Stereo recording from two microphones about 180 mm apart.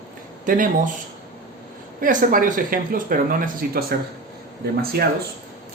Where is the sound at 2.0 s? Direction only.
45° right (ahead or behind).